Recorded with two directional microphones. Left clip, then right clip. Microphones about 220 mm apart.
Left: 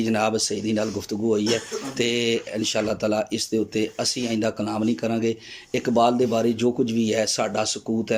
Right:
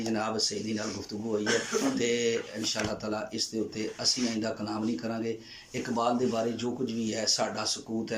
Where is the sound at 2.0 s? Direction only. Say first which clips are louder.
Left 10 dB; 40° left (ahead or behind).